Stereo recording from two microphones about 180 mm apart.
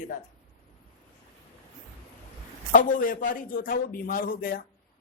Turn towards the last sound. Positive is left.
turn(degrees=55)  # may be behind; listen again after turning